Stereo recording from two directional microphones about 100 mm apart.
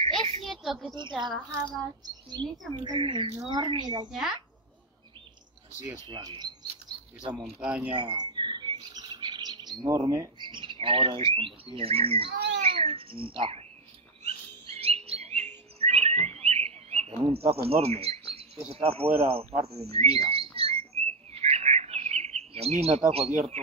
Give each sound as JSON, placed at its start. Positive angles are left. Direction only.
{"t": 0.0, "sound": "a sound", "side_deg": -65}
{"t": 0.5, "sound": "a sound", "side_deg": 0}
{"t": 1.1, "sound": "a woman's voice", "side_deg": 0}
{"t": 2.0, "sound": "a woman's voice", "side_deg": -45}
{"t": 4.1, "sound": "a woman's voice", "side_deg": -5}
{"t": 6.0, "sound": "speech", "side_deg": -45}
{"t": 7.6, "sound": "speech", "side_deg": -10}
{"t": 7.9, "sound": "chirp", "side_deg": -45}
{"t": 10.4, "sound": "bird", "side_deg": -55}
{"t": 11.3, "sound": "speech", "side_deg": -65}
{"t": 14.2, "sound": "bird", "side_deg": -90}
{"t": 18.7, "sound": "speech", "side_deg": -90}
{"t": 19.6, "sound": "bird", "side_deg": -90}
{"t": 23.5, "sound": "speech", "side_deg": -90}